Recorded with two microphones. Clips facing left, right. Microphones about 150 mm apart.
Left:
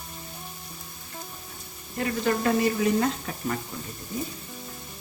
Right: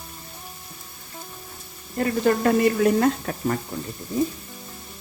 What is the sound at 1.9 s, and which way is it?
Speech, 45° right (ahead or behind).